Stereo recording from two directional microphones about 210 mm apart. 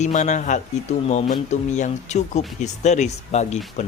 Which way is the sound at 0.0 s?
35° left (ahead or behind).